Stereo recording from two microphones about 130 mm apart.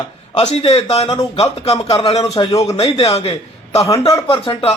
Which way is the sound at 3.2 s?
50° left (ahead or behind).